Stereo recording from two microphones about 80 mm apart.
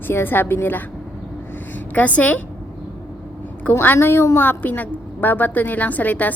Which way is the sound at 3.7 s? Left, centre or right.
Left.